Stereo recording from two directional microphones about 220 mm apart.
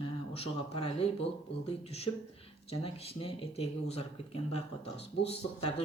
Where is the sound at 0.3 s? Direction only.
25° left (ahead or behind).